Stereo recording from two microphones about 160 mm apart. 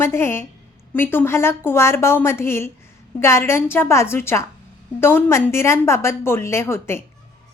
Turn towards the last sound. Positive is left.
turn(degrees=15)  # may be behind; listen again after turning